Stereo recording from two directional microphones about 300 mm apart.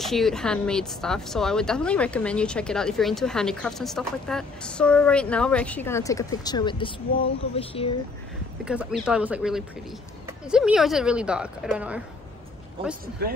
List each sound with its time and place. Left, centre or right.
0.0 s speech: centre
8.6 s speech: centre
12.8 s speech: centre
13.2 s speech: right